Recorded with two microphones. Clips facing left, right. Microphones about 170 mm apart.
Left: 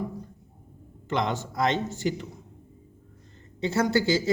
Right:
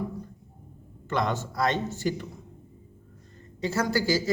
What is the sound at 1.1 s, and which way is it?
A man's voice, 20° left (ahead or behind).